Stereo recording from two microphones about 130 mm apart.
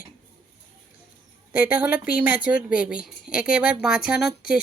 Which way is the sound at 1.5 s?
15° right (ahead or behind).